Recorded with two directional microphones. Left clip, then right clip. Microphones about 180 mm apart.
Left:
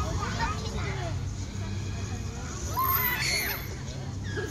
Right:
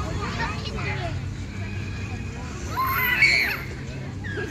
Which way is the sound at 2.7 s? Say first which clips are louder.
Right 6 dB; 45° left (ahead or behind).